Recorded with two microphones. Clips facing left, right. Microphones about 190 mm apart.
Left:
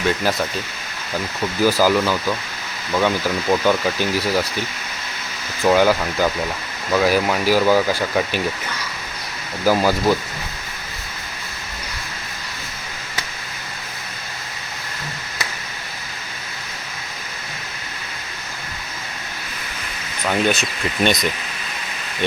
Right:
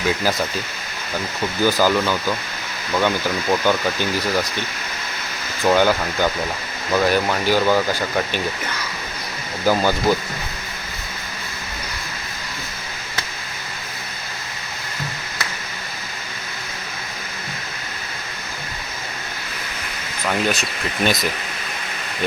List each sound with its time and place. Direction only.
0.1 s speech: centre (ahead or behind)
1.6 s speech: 5° left (ahead or behind)
5.6 s speech: centre (ahead or behind)
9.6 s speech: 5° left (ahead or behind)
20.2 s speech: centre (ahead or behind)